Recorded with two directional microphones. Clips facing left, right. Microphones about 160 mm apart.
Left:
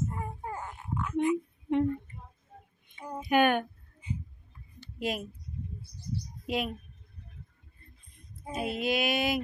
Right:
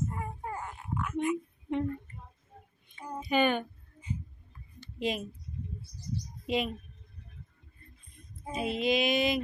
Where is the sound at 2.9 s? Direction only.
10° left (ahead or behind).